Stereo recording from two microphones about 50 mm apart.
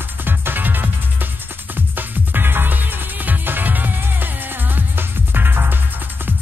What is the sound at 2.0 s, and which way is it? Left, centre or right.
Music, right.